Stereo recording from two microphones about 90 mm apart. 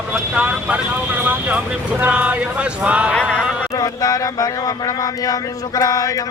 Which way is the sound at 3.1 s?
10° left (ahead or behind).